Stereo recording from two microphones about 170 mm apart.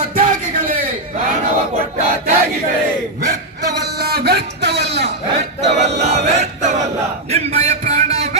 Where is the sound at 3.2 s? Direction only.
70° right (ahead or behind).